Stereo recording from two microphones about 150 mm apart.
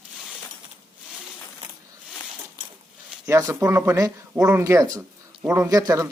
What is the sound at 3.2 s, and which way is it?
Speech, 20° right (ahead or behind).